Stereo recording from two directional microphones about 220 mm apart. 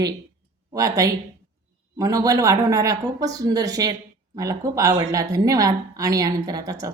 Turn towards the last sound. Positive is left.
turn(degrees=-15)  # may be behind; listen again after turning